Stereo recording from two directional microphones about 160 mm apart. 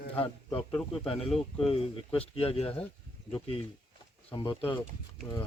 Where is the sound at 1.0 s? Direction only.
35° left (ahead or behind).